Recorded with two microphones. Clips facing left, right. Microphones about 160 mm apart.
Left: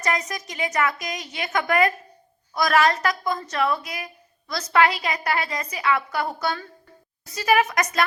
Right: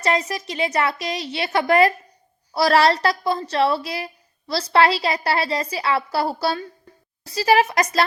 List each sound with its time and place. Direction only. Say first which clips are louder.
0.0 s a woman's voice: right 4 dB; 30° right (ahead or behind)